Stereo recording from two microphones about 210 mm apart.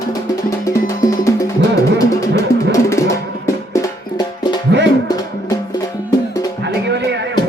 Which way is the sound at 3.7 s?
20° left (ahead or behind).